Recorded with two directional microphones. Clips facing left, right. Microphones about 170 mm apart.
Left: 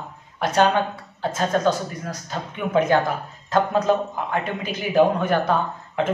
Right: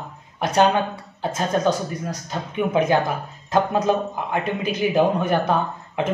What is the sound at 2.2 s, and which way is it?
Speech, 15° right (ahead or behind).